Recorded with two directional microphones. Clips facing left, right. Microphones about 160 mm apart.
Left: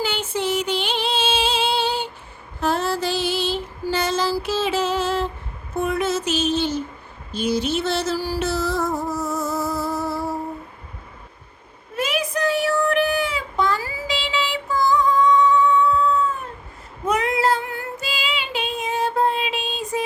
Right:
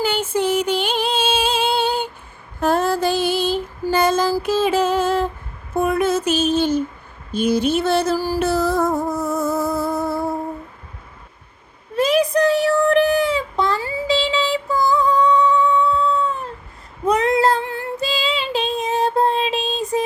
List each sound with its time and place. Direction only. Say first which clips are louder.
0.0 s female singing: right 4 dB; 50° right (ahead or behind)
5.7 s a sound: right 4 dB; 55° right (ahead or behind)
7.3 s music: right 4 dB; 55° right (ahead or behind)
11.9 s child singing: right 8 dB; 35° right (ahead or behind)
17.1 s female singing: right 4 dB; 35° right (ahead or behind)
18.0 s child singing: right 7 dB; 35° right (ahead or behind)